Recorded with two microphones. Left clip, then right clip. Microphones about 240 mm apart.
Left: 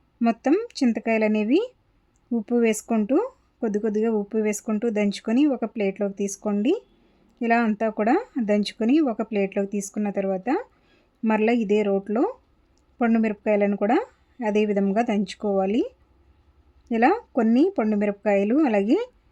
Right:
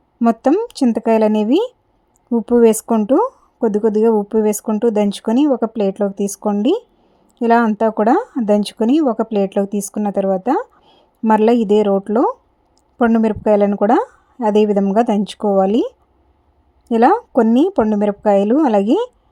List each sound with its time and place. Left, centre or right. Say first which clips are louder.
0.2 s speech: right 7 dB; centre
5.3 s speech: right 7 dB; centre
5.5 s speech: right 8 dB; right